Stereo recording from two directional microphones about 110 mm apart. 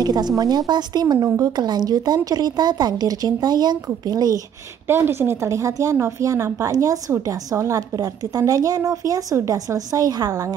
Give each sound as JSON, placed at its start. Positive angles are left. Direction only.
{"t": 0.0, "sound": "a woman's voice", "side_deg": -40}
{"t": 4.8, "sound": "a woman's voice", "side_deg": -20}